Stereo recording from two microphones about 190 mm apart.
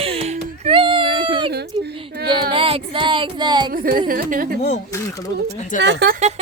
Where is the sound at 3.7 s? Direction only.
50° right (ahead or behind).